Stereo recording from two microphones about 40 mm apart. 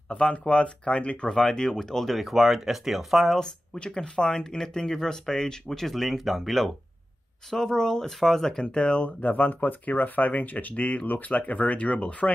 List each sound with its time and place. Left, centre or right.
0.1 s speech: left; by 3.3 s centre
3.8 s speech: left; by 6.7 s centre
7.5 s speech: centre
9.2 s speech: left
10.7 s speech: left